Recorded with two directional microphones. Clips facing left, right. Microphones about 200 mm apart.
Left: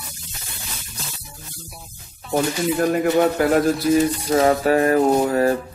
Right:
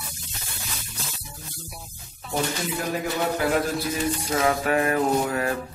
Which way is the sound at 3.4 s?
50° left (ahead or behind).